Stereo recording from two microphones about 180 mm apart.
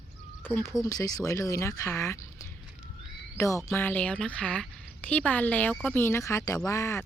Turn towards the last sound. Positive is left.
turn(degrees=15)  # may be behind; listen again after turning